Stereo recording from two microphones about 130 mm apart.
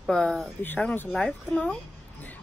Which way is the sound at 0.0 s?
5° left (ahead or behind).